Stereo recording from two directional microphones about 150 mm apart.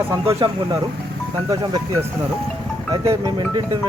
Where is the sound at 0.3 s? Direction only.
30° right (ahead or behind).